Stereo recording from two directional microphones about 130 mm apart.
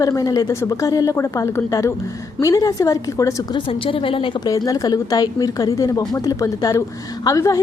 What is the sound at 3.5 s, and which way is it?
Speech, 45° left (ahead or behind).